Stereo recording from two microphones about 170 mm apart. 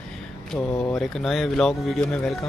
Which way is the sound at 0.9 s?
Centre (ahead or behind).